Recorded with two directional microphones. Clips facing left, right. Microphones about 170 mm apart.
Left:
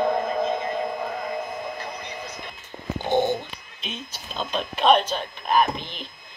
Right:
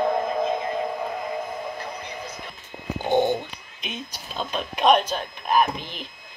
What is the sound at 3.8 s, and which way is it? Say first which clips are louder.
Speech: right 1 dB; 10° right (ahead or behind).